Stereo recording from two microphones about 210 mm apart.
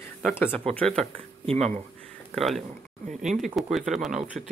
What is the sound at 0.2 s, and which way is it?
Speech, 10° left (ahead or behind).